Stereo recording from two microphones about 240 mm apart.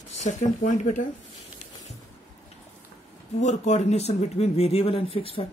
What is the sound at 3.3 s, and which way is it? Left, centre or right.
Speech, left.